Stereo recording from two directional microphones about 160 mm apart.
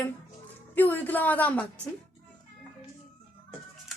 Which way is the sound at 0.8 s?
10° left (ahead or behind).